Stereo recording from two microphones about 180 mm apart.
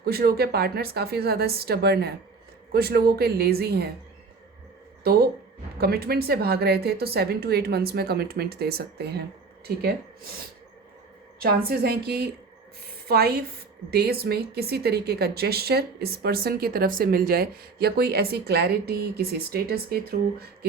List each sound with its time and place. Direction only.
0.0 s speech: 60° right (ahead or behind)
5.8 s speech: 60° right (ahead or behind)
11.4 s speech: 60° right (ahead or behind)